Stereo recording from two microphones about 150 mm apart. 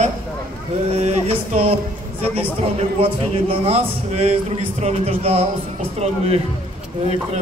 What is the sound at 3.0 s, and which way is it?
Speech, 40° right (ahead or behind).